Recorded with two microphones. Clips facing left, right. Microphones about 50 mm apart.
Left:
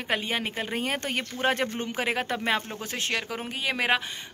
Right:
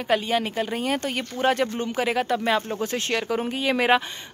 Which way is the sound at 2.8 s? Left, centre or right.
Centre.